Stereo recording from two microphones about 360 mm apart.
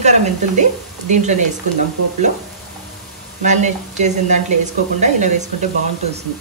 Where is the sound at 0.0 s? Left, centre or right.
Centre.